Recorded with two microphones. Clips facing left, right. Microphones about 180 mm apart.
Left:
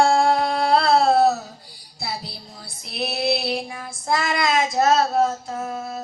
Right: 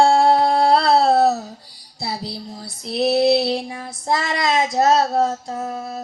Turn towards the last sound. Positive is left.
turn(degrees=-30)  # may be behind; listen again after turning